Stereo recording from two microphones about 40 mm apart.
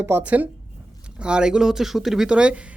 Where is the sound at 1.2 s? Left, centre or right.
Right.